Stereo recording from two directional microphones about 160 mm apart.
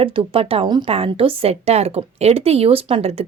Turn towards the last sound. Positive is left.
turn(degrees=-35)  # may be behind; listen again after turning